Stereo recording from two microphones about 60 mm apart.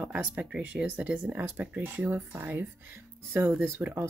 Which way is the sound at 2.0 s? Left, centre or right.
Right.